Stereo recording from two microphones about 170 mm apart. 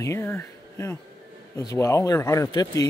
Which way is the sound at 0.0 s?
15° left (ahead or behind).